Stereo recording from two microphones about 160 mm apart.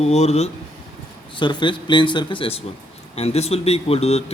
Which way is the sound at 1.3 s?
30° left (ahead or behind).